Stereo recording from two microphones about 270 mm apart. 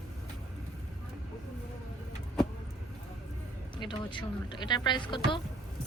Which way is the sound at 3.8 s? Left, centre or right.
Centre.